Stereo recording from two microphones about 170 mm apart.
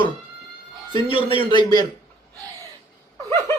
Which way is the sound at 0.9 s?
30° left (ahead or behind).